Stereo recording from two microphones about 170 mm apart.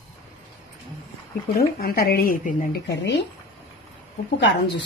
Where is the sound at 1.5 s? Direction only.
65° left (ahead or behind).